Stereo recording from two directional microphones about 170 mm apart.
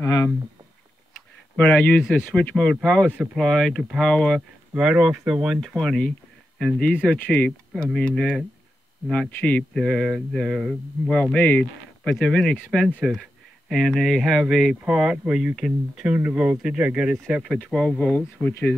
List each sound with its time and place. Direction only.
0.0 s speech: 20° left (ahead or behind)
1.6 s speech: 10° left (ahead or behind)